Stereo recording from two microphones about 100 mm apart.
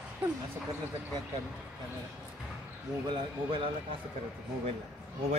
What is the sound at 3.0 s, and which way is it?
Speech, 60° right (ahead or behind).